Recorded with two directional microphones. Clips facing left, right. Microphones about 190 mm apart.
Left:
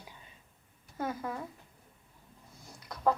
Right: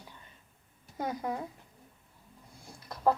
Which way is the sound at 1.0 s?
15° right (ahead or behind).